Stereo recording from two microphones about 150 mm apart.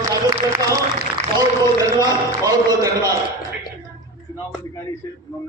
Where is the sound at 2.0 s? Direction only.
25° right (ahead or behind).